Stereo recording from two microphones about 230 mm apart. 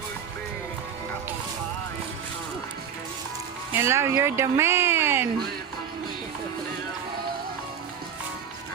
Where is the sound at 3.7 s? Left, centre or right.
Centre.